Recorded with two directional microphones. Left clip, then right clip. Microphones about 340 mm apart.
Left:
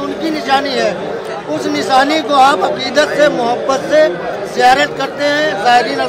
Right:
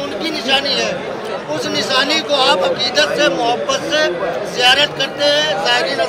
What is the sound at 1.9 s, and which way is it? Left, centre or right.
A man's voice, centre.